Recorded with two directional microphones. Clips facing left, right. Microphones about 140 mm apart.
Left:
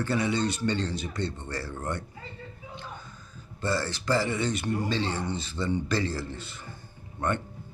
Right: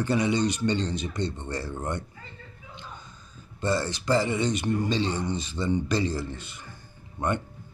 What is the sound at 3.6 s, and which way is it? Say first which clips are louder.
A man's voice: right 2 dB; 20° right (ahead or behind).